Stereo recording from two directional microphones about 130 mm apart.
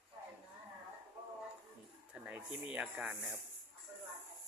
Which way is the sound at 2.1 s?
10° right (ahead or behind).